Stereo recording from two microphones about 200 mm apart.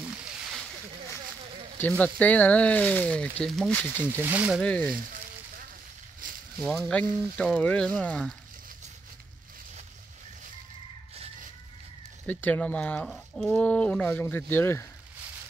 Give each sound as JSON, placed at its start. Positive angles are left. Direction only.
{"t": 0.1, "sound": "a sound", "side_deg": -5}
{"t": 1.8, "sound": "speech", "side_deg": 5}
{"t": 4.1, "sound": "speech", "side_deg": -10}
{"t": 4.6, "sound": "speech", "side_deg": 5}
{"t": 6.6, "sound": "speech", "side_deg": 0}
{"t": 12.3, "sound": "speech", "side_deg": 10}